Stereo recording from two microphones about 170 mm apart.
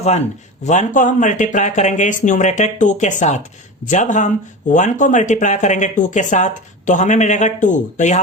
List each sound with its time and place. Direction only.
0.6 s speech: 45° left (ahead or behind)